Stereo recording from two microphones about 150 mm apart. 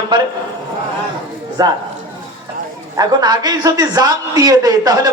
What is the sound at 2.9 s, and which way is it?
A man's voice, 25° right (ahead or behind).